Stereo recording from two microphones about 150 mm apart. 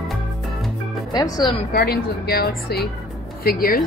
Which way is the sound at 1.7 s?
90° left.